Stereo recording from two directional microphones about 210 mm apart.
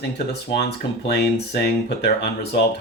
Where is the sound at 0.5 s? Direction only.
50° left (ahead or behind).